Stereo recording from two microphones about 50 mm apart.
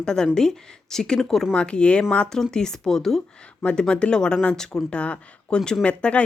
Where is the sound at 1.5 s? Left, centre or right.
Left.